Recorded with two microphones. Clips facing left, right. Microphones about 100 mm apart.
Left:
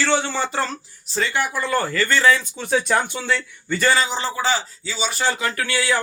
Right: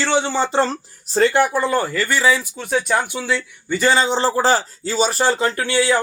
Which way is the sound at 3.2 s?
10° right (ahead or behind).